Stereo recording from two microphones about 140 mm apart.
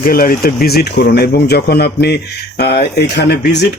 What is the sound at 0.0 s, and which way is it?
Speech, 90° left.